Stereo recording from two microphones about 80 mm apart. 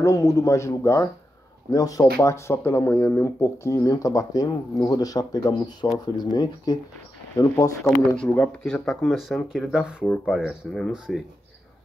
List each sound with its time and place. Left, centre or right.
0.0 s a man's voice: left
2.2 s a man's voice: left
3.9 s speech: left
5.9 s speech: left
7.3 s a man's voice: left
8.2 s speech: centre
8.6 s speech: centre
10.2 s speech: centre